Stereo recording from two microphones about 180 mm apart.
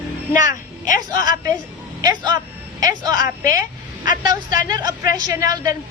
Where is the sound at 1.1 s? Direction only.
20° right (ahead or behind).